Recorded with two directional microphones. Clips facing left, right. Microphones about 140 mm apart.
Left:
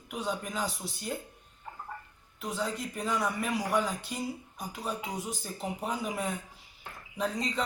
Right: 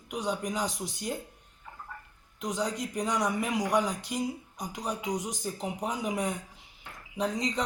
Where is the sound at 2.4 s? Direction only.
15° right (ahead or behind).